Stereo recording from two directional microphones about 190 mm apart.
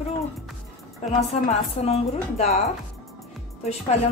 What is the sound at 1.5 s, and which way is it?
A woman's voice, 35° left (ahead or behind).